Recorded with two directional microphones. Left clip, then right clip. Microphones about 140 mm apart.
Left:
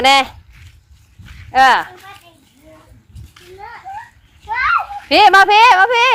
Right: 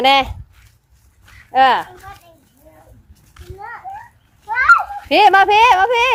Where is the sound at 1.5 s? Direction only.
10° right (ahead or behind).